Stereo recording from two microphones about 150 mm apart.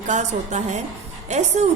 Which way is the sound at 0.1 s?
50° right (ahead or behind).